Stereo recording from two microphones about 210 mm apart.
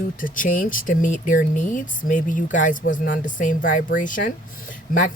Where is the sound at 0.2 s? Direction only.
40° left (ahead or behind).